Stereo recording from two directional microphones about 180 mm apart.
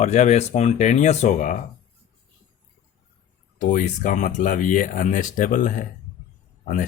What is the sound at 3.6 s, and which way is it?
Speech, 45° left (ahead or behind).